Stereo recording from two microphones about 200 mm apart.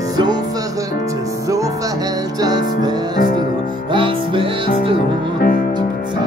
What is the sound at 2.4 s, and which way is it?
Music, 20° right (ahead or behind).